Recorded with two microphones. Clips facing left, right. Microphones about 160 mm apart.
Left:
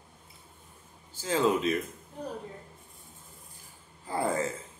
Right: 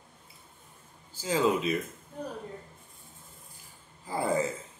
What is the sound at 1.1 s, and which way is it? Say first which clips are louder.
Speech: even; 10° right (ahead or behind).